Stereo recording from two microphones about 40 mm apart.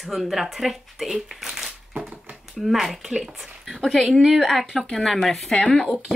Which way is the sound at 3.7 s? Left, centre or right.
Centre.